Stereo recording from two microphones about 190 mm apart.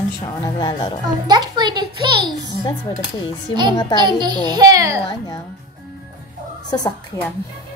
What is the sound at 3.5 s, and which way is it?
A child's voice, 25° right (ahead or behind).